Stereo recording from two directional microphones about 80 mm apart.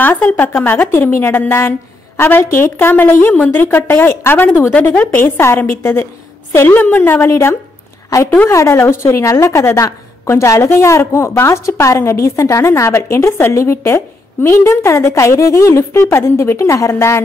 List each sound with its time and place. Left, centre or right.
0.0 s a woman's voice: left
7.2 s a woman's voice: left
8.1 s a woman's voice: left